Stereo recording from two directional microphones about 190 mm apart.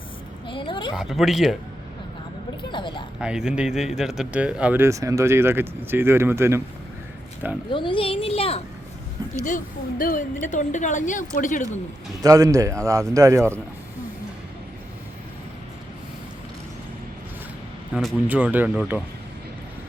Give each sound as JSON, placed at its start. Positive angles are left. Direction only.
{"t": 0.4, "sound": "a child's voice", "side_deg": 25}
{"t": 0.9, "sound": "speech", "side_deg": 0}
{"t": 2.6, "sound": "a child's voice", "side_deg": 25}
{"t": 3.2, "sound": "speech", "side_deg": -5}
{"t": 7.7, "sound": "a child's voice", "side_deg": 25}
{"t": 9.4, "sound": "a woman's voice", "side_deg": 45}
{"t": 12.2, "sound": "speech", "side_deg": -20}
{"t": 17.9, "sound": "speech", "side_deg": -5}